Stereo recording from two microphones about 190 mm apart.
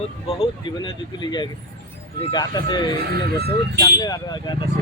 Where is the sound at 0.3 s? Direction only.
30° left (ahead or behind).